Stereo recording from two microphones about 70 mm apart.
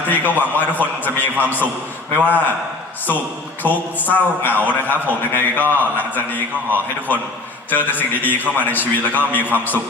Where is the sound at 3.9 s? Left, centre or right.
Left.